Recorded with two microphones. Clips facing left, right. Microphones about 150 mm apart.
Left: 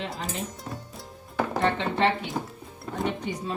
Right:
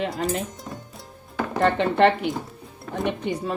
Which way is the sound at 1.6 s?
60° right (ahead or behind).